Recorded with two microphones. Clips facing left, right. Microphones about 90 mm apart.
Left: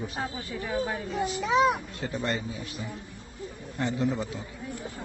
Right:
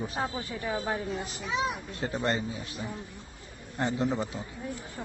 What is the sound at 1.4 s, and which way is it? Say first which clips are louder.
Speech: left 8 dB; 60° left (ahead or behind).